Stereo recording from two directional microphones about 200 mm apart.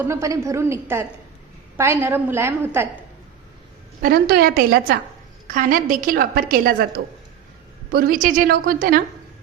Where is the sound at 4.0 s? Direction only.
50° right (ahead or behind).